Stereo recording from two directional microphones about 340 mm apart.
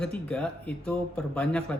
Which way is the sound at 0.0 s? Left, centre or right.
Centre.